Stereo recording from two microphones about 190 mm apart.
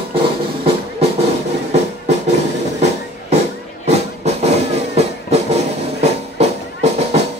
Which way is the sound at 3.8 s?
35° right (ahead or behind).